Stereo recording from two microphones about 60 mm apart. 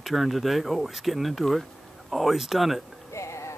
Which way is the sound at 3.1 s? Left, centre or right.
Left.